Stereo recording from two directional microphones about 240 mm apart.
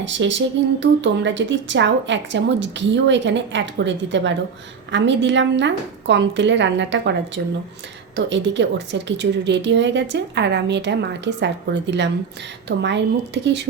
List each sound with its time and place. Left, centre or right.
0.0 s speech: right